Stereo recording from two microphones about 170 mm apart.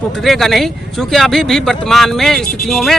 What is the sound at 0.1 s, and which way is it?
Speech, centre (ahead or behind).